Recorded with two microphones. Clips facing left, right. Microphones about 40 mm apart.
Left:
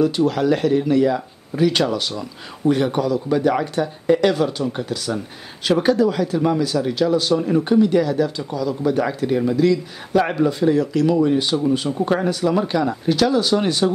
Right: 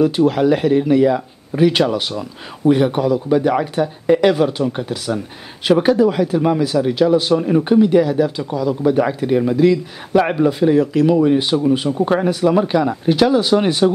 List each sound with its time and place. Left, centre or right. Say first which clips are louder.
0.0 s speech: right 4 dB; centre